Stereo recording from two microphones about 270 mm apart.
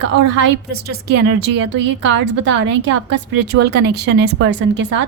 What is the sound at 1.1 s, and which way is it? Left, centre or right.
Speech, right.